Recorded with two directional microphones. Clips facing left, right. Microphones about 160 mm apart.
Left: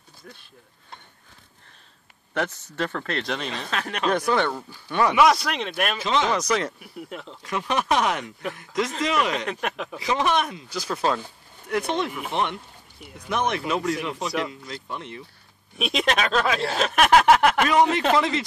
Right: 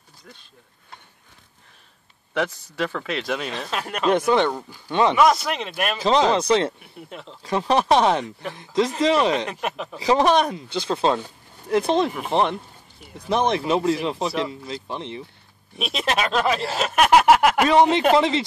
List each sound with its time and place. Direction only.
2.3 s speech: 5° right (ahead or behind)
4.0 s speech: 20° right (ahead or behind)
5.1 s speech: centre (ahead or behind)
6.0 s speech: 35° right (ahead or behind)
6.8 s speech: centre (ahead or behind)
7.4 s speech: 30° right (ahead or behind)
15.8 s speech: centre (ahead or behind)
17.6 s speech: 30° right (ahead or behind)